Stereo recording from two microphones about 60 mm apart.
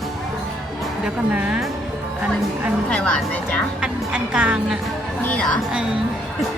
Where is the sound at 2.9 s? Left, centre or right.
Left.